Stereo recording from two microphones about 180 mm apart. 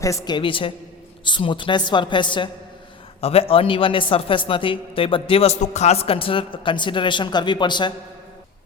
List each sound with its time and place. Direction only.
0.0 s a man's voice: 15° left (ahead or behind)